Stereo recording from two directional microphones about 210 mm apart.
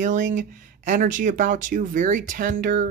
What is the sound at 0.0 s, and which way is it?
Speech, 35° right (ahead or behind).